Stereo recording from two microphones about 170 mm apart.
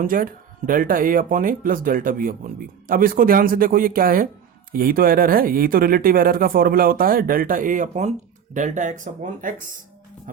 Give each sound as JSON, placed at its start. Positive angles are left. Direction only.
{"t": 0.0, "sound": "speech", "side_deg": -55}
{"t": 10.3, "sound": "music", "side_deg": -50}